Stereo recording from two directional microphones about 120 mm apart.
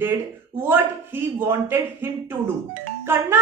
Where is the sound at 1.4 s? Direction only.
20° right (ahead or behind).